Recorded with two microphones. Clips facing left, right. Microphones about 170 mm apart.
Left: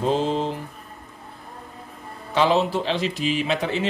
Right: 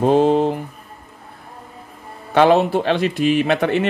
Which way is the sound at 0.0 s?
55° right (ahead or behind).